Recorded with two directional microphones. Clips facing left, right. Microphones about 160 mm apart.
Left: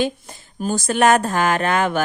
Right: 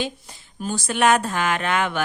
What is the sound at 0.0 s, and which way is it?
A woman's voice, 50° left (ahead or behind).